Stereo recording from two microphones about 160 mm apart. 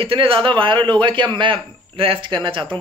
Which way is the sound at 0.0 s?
35° right (ahead or behind).